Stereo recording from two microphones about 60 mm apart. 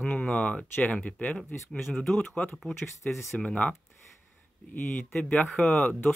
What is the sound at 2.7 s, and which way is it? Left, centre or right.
Speech, left.